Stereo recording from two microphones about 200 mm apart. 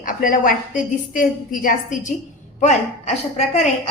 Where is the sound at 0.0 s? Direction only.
40° left (ahead or behind).